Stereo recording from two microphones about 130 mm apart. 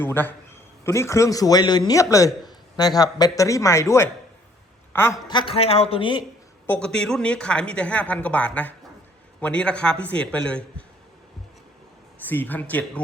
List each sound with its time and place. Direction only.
0.0 s speech: 15° left (ahead or behind)
5.3 s a man's voice: 35° left (ahead or behind)
5.5 s speech: 50° left (ahead or behind)
6.7 s speech: 10° left (ahead or behind)
12.2 s speech: 15° left (ahead or behind)